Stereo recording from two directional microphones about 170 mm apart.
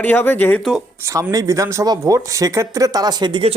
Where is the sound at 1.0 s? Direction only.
20° right (ahead or behind).